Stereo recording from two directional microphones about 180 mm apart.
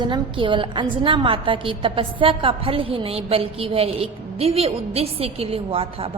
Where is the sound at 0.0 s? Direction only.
25° right (ahead or behind).